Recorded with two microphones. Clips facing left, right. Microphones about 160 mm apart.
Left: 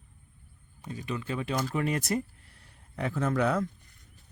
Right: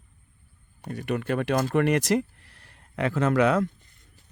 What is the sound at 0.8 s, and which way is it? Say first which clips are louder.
Speech: right 6 dB; 65° right (ahead or behind).